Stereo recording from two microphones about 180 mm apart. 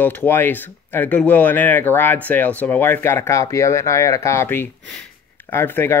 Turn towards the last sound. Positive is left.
turn(degrees=10)  # may be behind; listen again after turning